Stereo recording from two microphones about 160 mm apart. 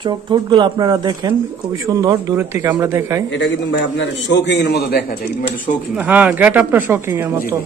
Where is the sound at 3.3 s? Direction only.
90° left; by 5.7 s 65° left (ahead or behind).